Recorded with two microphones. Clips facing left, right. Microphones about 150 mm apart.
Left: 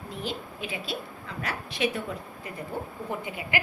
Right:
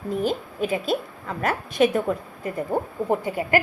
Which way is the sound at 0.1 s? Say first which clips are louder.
Right 11 dB; 45° right (ahead or behind).